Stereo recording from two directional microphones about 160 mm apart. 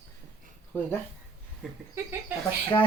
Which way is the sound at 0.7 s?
10° left (ahead or behind).